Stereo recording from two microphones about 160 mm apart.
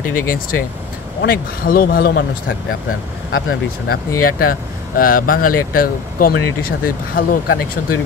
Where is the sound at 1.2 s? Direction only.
70° left (ahead or behind).